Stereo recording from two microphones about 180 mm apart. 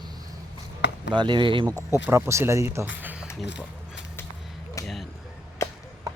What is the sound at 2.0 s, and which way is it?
Speech, 15° right (ahead or behind).